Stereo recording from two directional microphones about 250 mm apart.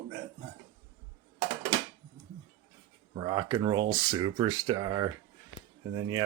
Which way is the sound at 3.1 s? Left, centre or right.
Centre.